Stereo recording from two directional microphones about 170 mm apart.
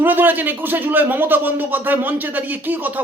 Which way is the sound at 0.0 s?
10° right (ahead or behind).